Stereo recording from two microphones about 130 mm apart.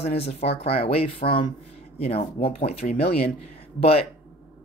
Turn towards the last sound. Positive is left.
turn(degrees=50)  # may be behind; listen again after turning